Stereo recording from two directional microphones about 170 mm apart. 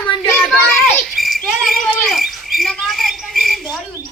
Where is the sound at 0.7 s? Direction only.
Centre (ahead or behind).